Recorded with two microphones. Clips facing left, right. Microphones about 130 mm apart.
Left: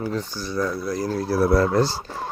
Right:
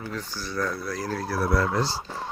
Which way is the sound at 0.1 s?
20° left (ahead or behind).